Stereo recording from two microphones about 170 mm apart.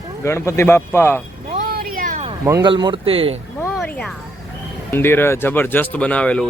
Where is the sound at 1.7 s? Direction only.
60° right (ahead or behind).